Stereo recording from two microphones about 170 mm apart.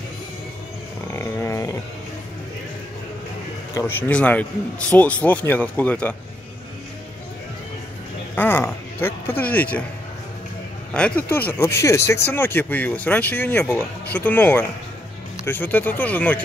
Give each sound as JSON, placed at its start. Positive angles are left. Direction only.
{"t": 1.1, "sound": "dog", "side_deg": 15}
{"t": 3.7, "sound": "speech", "side_deg": 10}
{"t": 8.4, "sound": "speech", "side_deg": 10}
{"t": 10.9, "sound": "speech", "side_deg": 5}